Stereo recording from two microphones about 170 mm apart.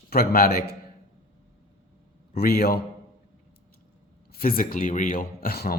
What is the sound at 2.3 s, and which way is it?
Speech, 65° left (ahead or behind).